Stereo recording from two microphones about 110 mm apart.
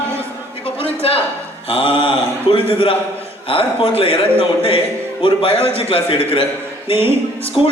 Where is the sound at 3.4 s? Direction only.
55° left (ahead or behind).